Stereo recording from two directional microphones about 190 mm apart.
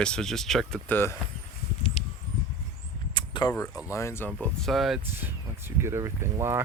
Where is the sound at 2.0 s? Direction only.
30° left (ahead or behind).